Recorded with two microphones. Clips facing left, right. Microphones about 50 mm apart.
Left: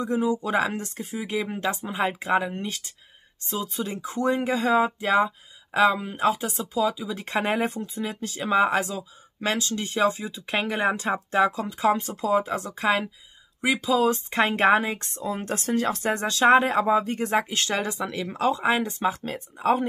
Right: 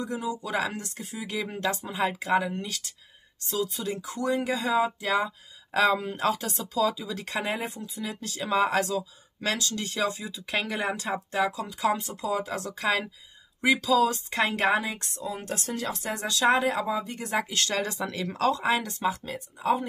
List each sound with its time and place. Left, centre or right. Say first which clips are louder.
0.0 s speech: left 7 dB; left
1.3 s speech: left 2 dB; left
5.7 s speech: left 3 dB; centre
7.2 s a woman's voice: left 6 dB; left
13.6 s speech: right 1 dB; centre
13.8 s a woman's voice: left 1 dB; left